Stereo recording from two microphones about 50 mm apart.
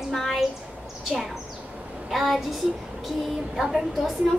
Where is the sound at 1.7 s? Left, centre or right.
Right.